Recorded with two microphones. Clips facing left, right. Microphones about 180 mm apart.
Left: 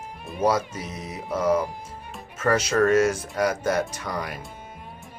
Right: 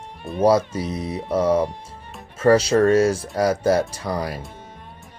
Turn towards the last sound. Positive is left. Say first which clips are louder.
# right 5 dB
turn(degrees=-35)  # may be behind; listen again after turning